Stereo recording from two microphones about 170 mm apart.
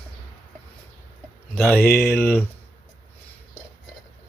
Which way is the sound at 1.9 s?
65° left (ahead or behind).